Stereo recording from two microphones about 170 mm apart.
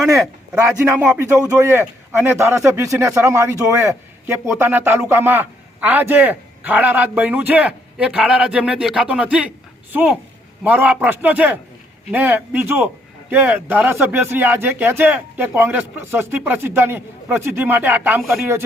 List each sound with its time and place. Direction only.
0.7 s a man's voice: 5° right (ahead or behind)